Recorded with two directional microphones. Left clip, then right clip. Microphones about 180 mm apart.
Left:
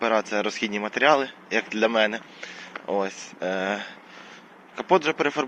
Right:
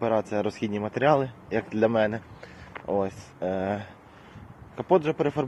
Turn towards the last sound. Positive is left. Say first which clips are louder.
# left 2 dB
turn(degrees=-20)  # may be behind; listen again after turning